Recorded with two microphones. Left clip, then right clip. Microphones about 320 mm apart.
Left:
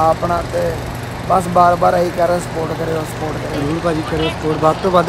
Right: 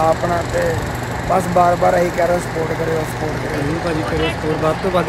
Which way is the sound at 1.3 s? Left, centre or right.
Centre.